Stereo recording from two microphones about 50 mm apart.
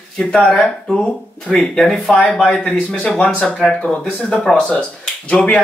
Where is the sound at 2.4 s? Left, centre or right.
Centre.